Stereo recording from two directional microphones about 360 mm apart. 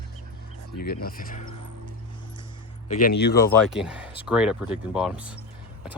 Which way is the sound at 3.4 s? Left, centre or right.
Centre.